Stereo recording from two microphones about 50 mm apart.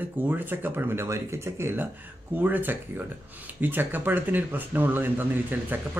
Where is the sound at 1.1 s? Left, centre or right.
Right.